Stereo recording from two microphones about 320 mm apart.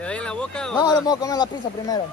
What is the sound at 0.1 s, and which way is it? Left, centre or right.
Speech, centre.